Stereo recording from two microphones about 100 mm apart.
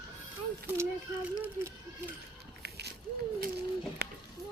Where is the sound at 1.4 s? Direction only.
20° right (ahead or behind).